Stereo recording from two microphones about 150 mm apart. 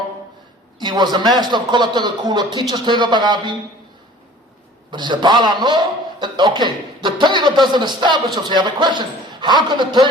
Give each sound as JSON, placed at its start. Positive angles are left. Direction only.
{"t": 0.8, "sound": "speech", "side_deg": -30}
{"t": 4.9, "sound": "speech", "side_deg": -30}